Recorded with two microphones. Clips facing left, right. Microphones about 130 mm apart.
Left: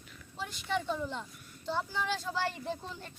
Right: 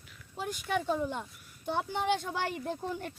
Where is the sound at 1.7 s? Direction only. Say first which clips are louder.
Right 4 dB; 60° right (ahead or behind).